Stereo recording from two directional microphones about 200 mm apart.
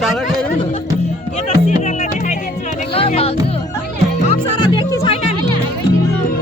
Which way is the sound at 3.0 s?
30° left (ahead or behind).